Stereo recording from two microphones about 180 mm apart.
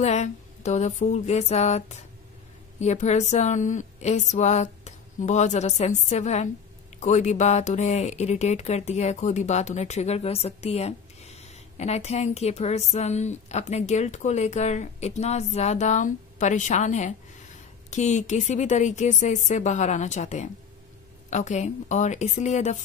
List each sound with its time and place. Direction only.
0.0 s speech: 40° left (ahead or behind)